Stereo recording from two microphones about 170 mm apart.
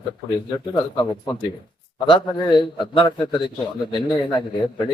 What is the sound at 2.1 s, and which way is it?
A man's voice, 25° left (ahead or behind).